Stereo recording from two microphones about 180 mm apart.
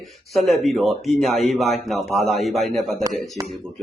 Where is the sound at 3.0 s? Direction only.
20° right (ahead or behind).